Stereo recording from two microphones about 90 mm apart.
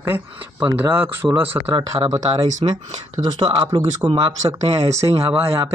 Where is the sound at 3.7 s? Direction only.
70° right (ahead or behind).